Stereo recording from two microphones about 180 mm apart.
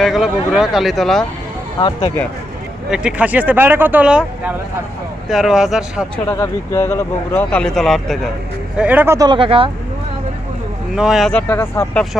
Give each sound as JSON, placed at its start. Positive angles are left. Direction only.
{"t": 0.0, "sound": "speech", "side_deg": 0}
{"t": 1.8, "sound": "speech", "side_deg": 20}
{"t": 2.9, "sound": "speech", "side_deg": -5}
{"t": 6.2, "sound": "speech", "side_deg": 15}
{"t": 10.9, "sound": "speech", "side_deg": -5}